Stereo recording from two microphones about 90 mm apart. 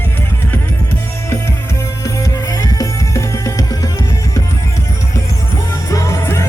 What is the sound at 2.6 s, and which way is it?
Music, 35° left (ahead or behind).